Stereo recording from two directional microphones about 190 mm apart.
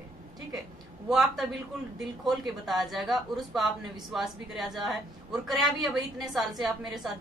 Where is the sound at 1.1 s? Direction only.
Centre (ahead or behind).